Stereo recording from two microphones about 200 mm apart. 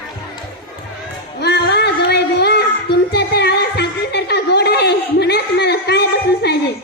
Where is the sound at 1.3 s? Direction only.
55° left (ahead or behind).